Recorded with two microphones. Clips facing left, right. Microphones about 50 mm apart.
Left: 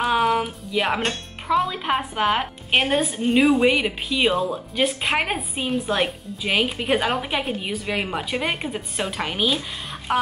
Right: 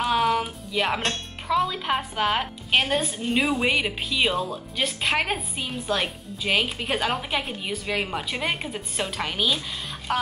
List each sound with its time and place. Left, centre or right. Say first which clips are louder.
0.0 s music: left 2 dB; centre
1.7 s a woman's voice: left 3 dB; centre
3.3 s a woman's voice: left 7 dB; centre